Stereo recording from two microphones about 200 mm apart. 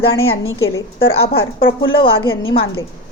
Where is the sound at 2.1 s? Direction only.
85° left.